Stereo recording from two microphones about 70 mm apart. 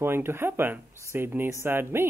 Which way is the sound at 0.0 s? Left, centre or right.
Right.